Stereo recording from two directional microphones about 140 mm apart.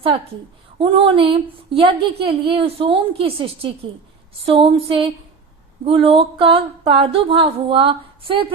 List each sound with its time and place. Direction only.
0.8 s speech: 40° right (ahead or behind)